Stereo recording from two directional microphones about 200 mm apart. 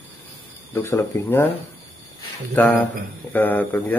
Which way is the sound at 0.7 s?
10° left (ahead or behind).